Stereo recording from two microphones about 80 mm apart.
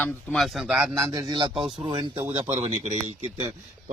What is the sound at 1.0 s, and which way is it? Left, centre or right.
Speech, right.